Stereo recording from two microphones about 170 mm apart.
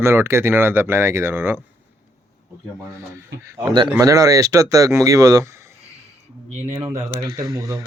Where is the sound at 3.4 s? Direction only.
25° right (ahead or behind).